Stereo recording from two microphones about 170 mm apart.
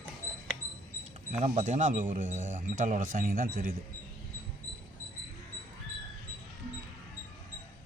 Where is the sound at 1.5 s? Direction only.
45° right (ahead or behind).